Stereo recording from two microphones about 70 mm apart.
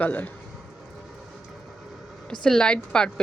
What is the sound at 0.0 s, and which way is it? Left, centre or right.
Speech, left.